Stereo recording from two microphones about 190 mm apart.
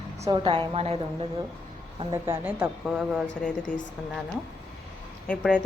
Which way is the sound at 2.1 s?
10° right (ahead or behind).